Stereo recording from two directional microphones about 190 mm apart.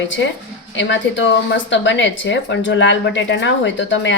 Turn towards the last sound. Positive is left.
turn(degrees=75)  # may be behind; listen again after turning